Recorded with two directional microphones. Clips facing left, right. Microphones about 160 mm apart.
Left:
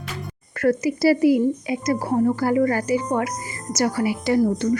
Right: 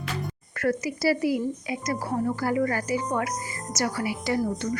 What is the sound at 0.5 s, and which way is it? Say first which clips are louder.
A woman's voice: left 7 dB; 25° left (ahead or behind).